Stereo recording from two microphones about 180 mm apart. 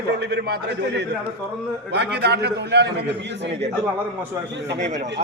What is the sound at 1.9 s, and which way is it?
A man's voice, 70° right (ahead or behind).